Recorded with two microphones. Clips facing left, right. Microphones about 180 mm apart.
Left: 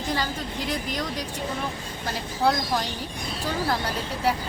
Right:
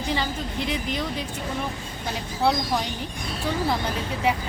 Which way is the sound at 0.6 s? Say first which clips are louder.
Right 2 dB; 40° left (ahead or behind).